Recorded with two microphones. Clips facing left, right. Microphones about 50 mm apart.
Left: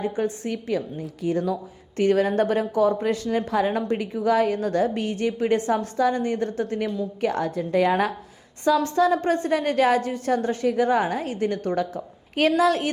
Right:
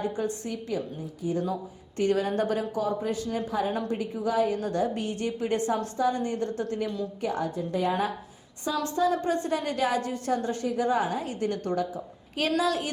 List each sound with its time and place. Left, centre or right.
0.4 s a woman's voice: left
2.0 s a woman's voice: left
3.0 s speech: left
3.2 s a woman's voice: left
3.7 s a woman's voice: left
7.3 s a woman's voice: left
8.7 s a woman's voice: left
9.1 s a woman's voice: left